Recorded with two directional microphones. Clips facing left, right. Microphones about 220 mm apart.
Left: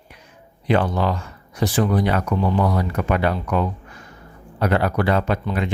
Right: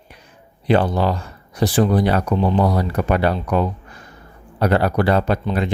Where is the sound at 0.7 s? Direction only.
35° right (ahead or behind).